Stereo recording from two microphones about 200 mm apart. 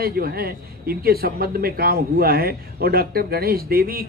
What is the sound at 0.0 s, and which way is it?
A man's voice, 50° right (ahead or behind).